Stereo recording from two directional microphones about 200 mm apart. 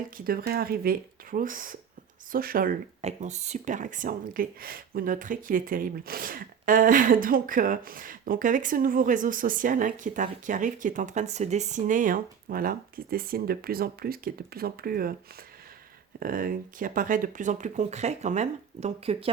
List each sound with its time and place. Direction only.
0.3 s speech: 50° right (ahead or behind)
16.2 s speech: 45° right (ahead or behind)